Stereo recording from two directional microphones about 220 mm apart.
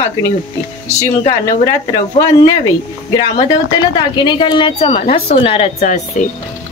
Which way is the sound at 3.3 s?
20° left (ahead or behind).